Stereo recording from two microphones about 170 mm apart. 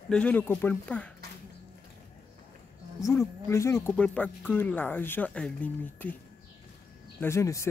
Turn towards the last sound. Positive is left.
turn(degrees=15)  # may be behind; listen again after turning